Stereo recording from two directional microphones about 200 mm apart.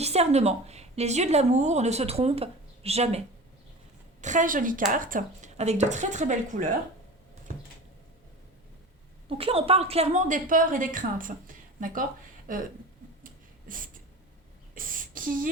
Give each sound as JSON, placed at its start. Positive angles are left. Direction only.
{"t": 0.0, "sound": "a woman's voice", "side_deg": -30}
{"t": 4.2, "sound": "a woman's voice", "side_deg": -40}
{"t": 9.4, "sound": "a woman's voice", "side_deg": -30}
{"t": 12.5, "sound": "a sound", "side_deg": -45}